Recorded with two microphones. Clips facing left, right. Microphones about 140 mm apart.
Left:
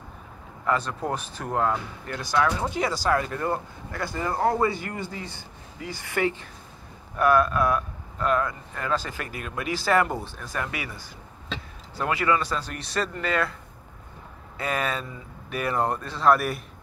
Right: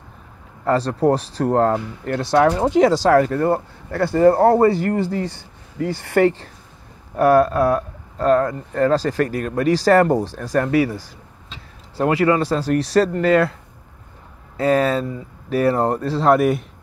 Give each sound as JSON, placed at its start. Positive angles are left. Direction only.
{"t": 0.7, "sound": "speech", "side_deg": -35}
{"t": 2.7, "sound": "speech", "side_deg": -80}
{"t": 4.4, "sound": "speech", "side_deg": -40}
{"t": 5.8, "sound": "speech", "side_deg": -60}
{"t": 7.2, "sound": "speech", "side_deg": -35}
{"t": 14.6, "sound": "speech", "side_deg": -35}